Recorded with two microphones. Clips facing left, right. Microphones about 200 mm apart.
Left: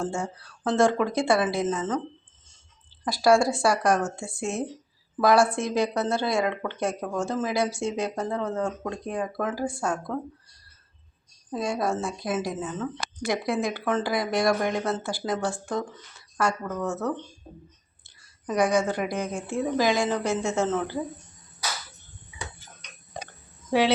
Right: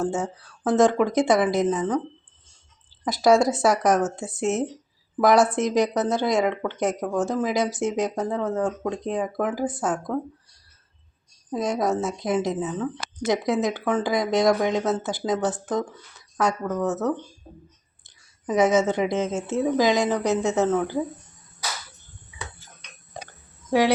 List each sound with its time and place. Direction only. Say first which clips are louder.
0.7 s speech: right 3 dB; 20° right (ahead or behind)
3.1 s speech: right 2 dB; 20° right (ahead or behind)
8.1 s speech: right 3 dB; centre (ahead or behind)
8.6 s speech: right 4 dB; 20° right (ahead or behind)
11.5 s speech: right 3 dB; 20° right (ahead or behind)
16.8 s speech: right 4 dB; 20° right (ahead or behind)
18.4 s speech: right 4 dB; 20° right (ahead or behind)